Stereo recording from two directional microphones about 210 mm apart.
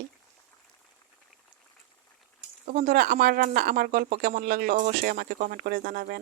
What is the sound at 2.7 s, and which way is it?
Speech, 40° right (ahead or behind).